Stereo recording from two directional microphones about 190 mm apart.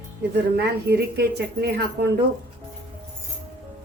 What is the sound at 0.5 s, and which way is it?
A woman's voice, 60° right (ahead or behind).